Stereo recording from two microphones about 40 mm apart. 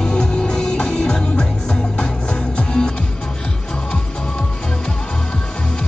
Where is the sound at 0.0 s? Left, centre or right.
Left.